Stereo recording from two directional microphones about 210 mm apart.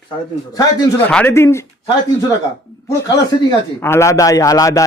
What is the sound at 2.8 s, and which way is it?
A man's voice, 15° left (ahead or behind).